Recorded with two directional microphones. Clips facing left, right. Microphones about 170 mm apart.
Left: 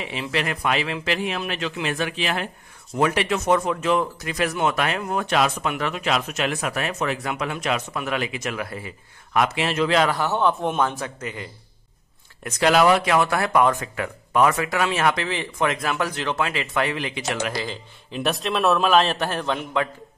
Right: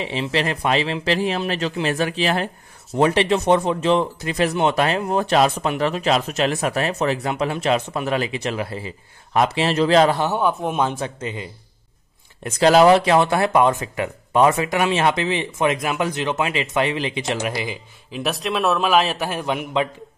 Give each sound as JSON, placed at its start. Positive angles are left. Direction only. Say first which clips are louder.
{"t": 0.0, "sound": "speech", "louder": "right 4 dB", "side_deg": -30}
{"t": 10.3, "sound": "a man's voice", "louder": "even", "side_deg": -5}
{"t": 10.8, "sound": "speech", "louder": "right 2 dB", "side_deg": -25}
{"t": 18.1, "sound": "a man's voice", "louder": "right 1 dB", "side_deg": 0}